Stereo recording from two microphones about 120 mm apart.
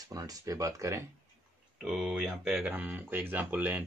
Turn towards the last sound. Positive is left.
turn(degrees=-15)  # may be behind; listen again after turning